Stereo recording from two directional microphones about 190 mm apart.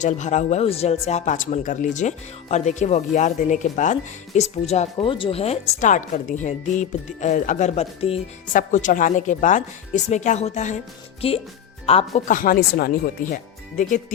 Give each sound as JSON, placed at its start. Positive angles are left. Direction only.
{"t": 0.0, "sound": "speech", "side_deg": 40}
{"t": 8.5, "sound": "speech", "side_deg": 45}
{"t": 12.3, "sound": "speech", "side_deg": 50}